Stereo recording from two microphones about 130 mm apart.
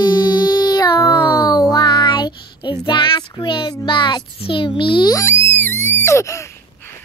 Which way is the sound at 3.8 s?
40° left (ahead or behind).